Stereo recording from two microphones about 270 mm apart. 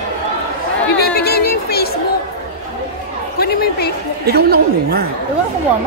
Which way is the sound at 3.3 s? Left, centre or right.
Left.